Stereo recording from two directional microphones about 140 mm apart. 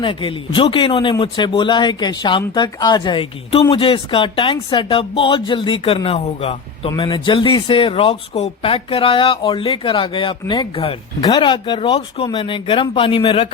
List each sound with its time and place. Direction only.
0.0 s speech: 35° left (ahead or behind)